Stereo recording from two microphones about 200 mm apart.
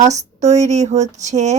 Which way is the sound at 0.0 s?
35° right (ahead or behind).